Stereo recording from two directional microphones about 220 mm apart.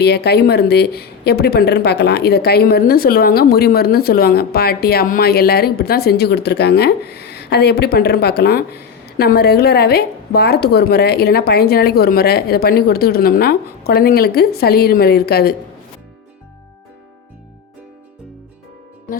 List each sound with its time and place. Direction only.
0.0 s a woman's voice: 50° left (ahead or behind)